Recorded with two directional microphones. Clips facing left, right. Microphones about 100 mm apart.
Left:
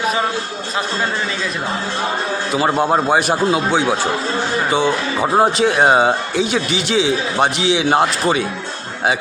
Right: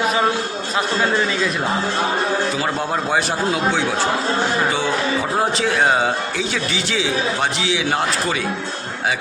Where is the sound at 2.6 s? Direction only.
25° left (ahead or behind).